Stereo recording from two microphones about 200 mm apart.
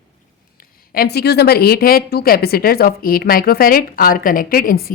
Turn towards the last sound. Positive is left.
turn(degrees=50)  # may be behind; listen again after turning